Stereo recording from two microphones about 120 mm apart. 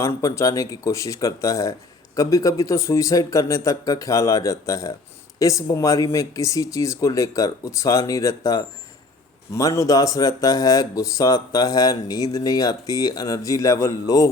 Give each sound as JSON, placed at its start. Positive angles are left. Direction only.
{"t": 0.0, "sound": "speech", "side_deg": 25}